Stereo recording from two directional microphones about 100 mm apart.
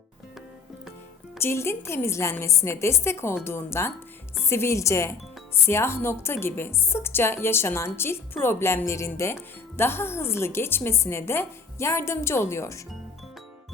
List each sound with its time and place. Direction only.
1.4 s a woman's voice: 25° left (ahead or behind)